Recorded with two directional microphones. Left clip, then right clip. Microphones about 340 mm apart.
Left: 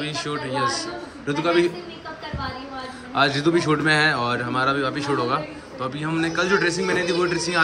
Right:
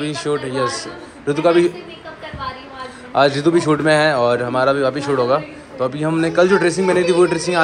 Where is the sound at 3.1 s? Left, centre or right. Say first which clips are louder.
Right 5 dB; centre.